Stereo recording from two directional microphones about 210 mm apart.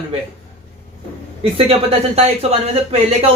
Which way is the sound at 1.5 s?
30° right (ahead or behind).